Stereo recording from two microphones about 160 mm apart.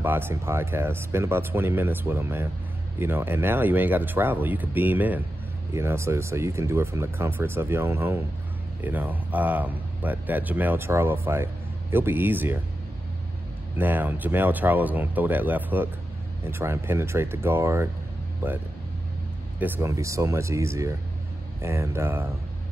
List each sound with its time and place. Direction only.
0.0 s speech: 15° right (ahead or behind)
13.7 s speech: 10° right (ahead or behind)
19.6 s speech: 20° right (ahead or behind)